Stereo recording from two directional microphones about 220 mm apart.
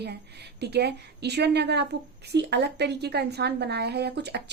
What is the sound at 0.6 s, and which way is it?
Speech, 50° right (ahead or behind).